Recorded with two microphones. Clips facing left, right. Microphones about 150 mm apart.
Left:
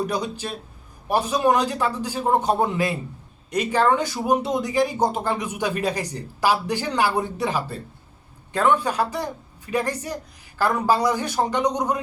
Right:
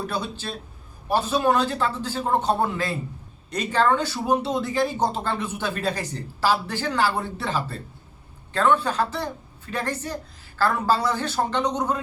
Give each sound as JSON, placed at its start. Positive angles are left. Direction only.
{"t": 0.0, "sound": "speech", "side_deg": 15}